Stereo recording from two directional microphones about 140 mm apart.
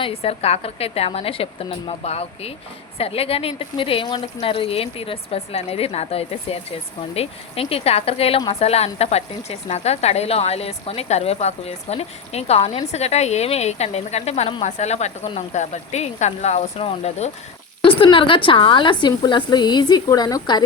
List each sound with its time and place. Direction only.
0.0 s speech: 45° left (ahead or behind)
17.8 s a woman's voice: 40° left (ahead or behind)